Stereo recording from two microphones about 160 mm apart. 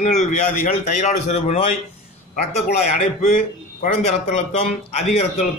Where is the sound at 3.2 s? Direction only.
50° left (ahead or behind).